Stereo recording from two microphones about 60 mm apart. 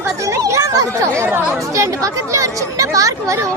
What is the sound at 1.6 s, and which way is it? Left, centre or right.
Speech, right.